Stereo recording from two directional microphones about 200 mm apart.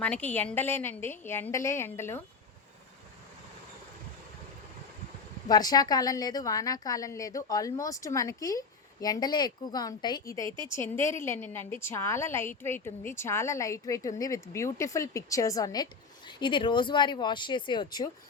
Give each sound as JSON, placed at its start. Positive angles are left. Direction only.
{"t": 0.0, "sound": "a woman's voice", "side_deg": 5}
{"t": 5.5, "sound": "a woman's voice", "side_deg": 20}